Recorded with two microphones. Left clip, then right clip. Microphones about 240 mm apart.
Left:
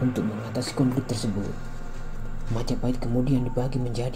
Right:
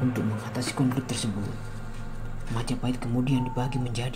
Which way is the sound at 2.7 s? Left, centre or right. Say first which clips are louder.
Left 3 dB; right.